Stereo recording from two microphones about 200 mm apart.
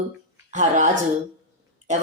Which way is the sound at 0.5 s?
35° right (ahead or behind).